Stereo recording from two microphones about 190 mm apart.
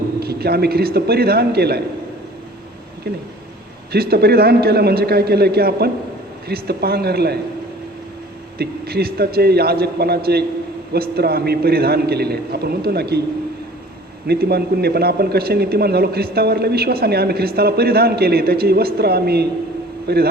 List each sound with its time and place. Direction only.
0.2 s speech: 55° right (ahead or behind)
3.9 s speech: 55° right (ahead or behind)
8.5 s speech: 55° right (ahead or behind)
14.3 s speech: 55° right (ahead or behind)